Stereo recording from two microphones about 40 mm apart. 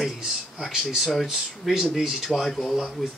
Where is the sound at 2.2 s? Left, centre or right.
Centre.